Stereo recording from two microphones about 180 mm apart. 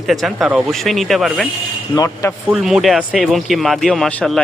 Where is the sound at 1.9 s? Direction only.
15° left (ahead or behind).